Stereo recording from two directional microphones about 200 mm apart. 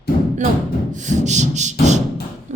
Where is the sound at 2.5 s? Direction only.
35° right (ahead or behind).